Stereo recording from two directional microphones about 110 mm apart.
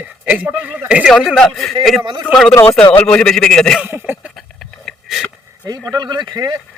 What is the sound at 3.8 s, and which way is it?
Speech, 20° right (ahead or behind).